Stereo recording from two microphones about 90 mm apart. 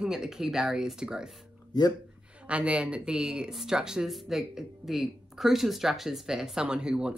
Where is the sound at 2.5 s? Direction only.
10° right (ahead or behind).